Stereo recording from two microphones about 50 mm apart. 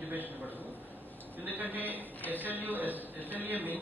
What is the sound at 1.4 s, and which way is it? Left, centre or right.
Speech, right.